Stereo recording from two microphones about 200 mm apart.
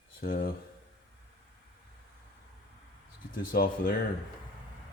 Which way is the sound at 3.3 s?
45° left (ahead or behind).